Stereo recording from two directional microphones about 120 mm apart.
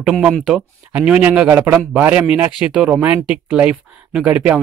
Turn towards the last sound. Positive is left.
turn(degrees=-10)  # may be behind; listen again after turning